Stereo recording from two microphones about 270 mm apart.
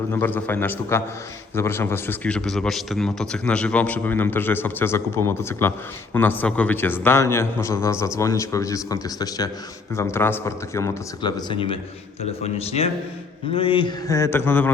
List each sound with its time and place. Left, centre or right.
0.1 s a man's voice: centre